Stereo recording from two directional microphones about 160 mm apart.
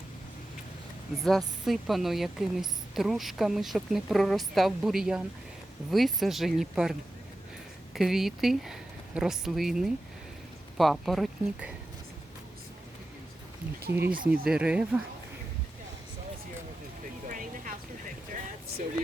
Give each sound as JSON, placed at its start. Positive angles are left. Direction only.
{"t": 1.2, "sound": "a woman's voice", "side_deg": 0}
{"t": 7.9, "sound": "a woman's voice", "side_deg": 0}
{"t": 13.9, "sound": "speech", "side_deg": -10}
{"t": 17.2, "sound": "vehicle", "side_deg": -55}